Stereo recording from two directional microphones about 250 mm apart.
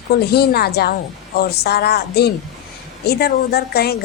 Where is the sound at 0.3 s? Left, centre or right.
Left.